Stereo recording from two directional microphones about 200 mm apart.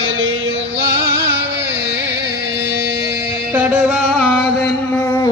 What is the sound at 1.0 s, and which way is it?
Music, 55° right (ahead or behind).